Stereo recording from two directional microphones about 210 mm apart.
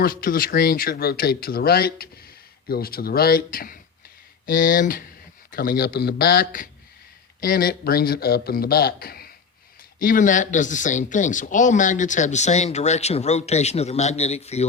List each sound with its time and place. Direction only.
0.0 s speech: 45° left (ahead or behind)